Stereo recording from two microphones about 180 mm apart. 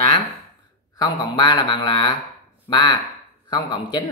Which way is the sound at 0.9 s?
25° left (ahead or behind).